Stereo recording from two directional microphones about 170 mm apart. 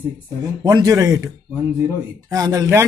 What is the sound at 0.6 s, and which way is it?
Speech, 25° right (ahead or behind).